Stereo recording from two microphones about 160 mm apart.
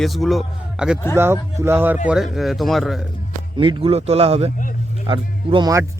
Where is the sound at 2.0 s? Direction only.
5° right (ahead or behind).